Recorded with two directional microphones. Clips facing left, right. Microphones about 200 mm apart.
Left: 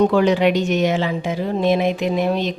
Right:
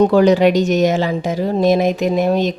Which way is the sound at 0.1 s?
40° right (ahead or behind).